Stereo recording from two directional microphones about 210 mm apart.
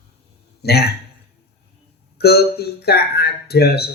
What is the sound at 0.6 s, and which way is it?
Speech, 50° left (ahead or behind).